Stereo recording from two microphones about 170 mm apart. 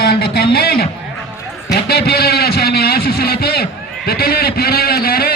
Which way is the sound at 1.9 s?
65° left (ahead or behind).